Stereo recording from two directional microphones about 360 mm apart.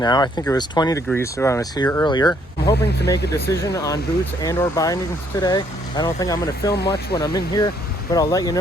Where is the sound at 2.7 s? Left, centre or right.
Left.